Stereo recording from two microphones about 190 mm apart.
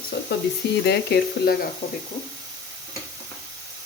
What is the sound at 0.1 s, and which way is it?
Frying, 60° left (ahead or behind).